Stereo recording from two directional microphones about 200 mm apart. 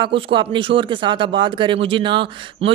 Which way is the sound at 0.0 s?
25° right (ahead or behind).